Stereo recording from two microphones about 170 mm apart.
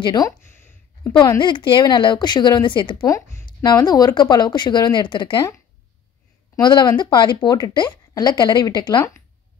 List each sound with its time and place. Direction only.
0.0 s speech: 25° left (ahead or behind)
0.4 s a sound: 15° left (ahead or behind)
1.1 s speech: 25° left (ahead or behind)